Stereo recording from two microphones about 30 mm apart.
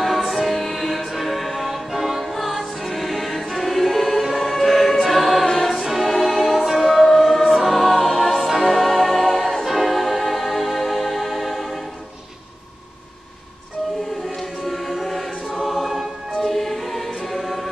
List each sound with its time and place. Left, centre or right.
0.0 s music: centre
4.4 s choir: centre
7.5 s music: centre
14.3 s choir: centre